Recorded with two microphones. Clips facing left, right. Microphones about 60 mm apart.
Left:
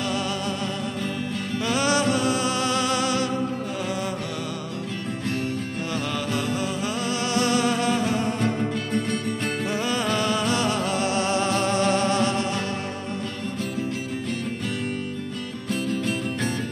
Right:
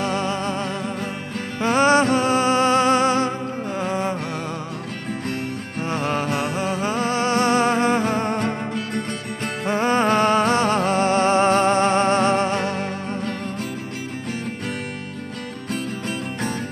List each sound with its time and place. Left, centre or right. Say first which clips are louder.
0.0 s music: right 4 dB; right
1.6 s music: right 7 dB; right
5.9 s music: right 7 dB; right
9.7 s music: right 9 dB; right